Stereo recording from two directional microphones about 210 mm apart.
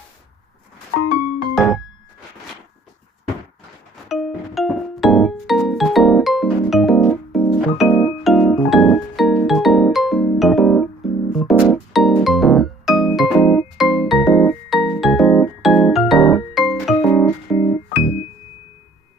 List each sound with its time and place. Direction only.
1.5 s music: centre (ahead or behind)
4.1 s music: centre (ahead or behind); by 17.8 s 20° left (ahead or behind)
17.9 s music: 30° left (ahead or behind)